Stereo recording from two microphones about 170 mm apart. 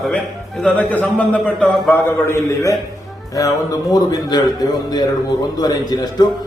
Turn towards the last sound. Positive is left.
turn(degrees=25)  # may be behind; listen again after turning